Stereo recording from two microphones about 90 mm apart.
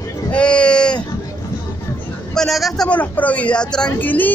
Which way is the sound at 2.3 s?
5° left (ahead or behind).